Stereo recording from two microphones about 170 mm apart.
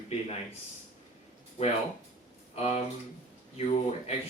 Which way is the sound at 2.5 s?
40° left (ahead or behind).